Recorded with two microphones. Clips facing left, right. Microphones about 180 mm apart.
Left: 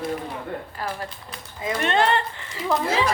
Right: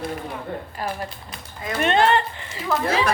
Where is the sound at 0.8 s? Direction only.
15° right (ahead or behind).